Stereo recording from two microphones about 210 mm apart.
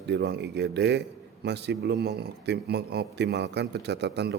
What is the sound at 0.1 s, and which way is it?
A man's voice, 55° right (ahead or behind).